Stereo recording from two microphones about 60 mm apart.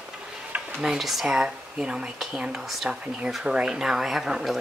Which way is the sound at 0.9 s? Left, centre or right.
Centre.